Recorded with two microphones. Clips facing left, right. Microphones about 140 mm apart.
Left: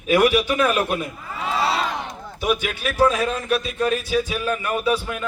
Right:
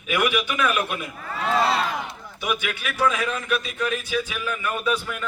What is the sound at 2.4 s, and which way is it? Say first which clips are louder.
A man's voice: left 5 dB; 40° left (ahead or behind).